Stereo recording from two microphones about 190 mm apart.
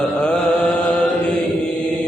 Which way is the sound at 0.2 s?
5° left (ahead or behind).